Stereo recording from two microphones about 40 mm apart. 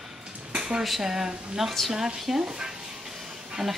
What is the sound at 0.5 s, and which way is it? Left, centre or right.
Dishes, centre.